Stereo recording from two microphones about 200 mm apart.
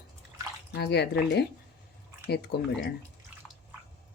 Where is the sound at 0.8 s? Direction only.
55° left (ahead or behind).